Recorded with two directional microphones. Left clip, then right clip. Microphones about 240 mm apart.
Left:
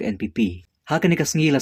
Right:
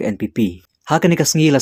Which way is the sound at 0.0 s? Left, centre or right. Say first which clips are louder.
Right 4 dB; centre.